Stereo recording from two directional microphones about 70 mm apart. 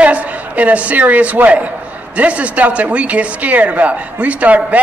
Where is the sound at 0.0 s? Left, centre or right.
Right.